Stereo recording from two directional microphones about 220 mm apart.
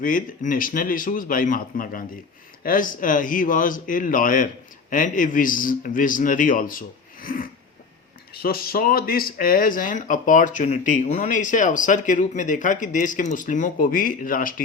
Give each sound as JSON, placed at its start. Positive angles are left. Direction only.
{"t": 0.0, "sound": "speech", "side_deg": 35}